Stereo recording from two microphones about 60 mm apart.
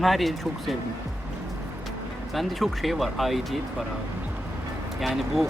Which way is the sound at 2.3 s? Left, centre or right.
Centre.